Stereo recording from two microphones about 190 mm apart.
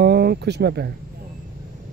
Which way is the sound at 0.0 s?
55° right (ahead or behind).